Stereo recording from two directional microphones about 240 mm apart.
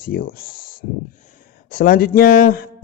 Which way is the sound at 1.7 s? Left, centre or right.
Left.